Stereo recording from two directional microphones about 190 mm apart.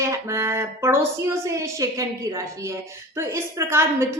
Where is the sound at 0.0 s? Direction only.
15° right (ahead or behind).